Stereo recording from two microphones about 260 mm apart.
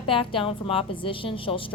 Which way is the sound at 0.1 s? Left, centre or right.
Centre.